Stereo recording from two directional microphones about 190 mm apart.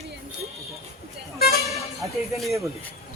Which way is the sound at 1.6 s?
Centre (ahead or behind).